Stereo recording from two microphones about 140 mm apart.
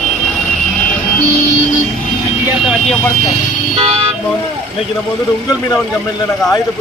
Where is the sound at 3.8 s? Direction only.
45° right (ahead or behind).